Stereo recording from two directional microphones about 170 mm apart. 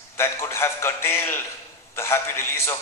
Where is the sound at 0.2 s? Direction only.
15° left (ahead or behind).